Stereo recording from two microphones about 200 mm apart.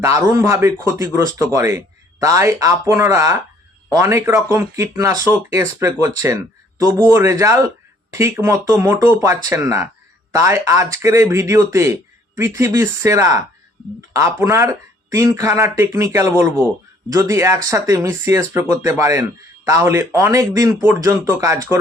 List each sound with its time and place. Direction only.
0.0 s speech: 15° right (ahead or behind)